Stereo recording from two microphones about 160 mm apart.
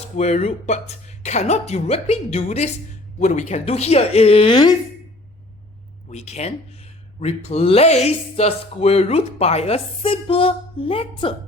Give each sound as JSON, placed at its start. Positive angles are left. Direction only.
{"t": 0.2, "sound": "speech", "side_deg": 40}
{"t": 6.1, "sound": "speech", "side_deg": 45}